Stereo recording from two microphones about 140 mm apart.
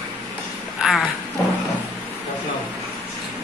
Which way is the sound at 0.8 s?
Centre (ahead or behind).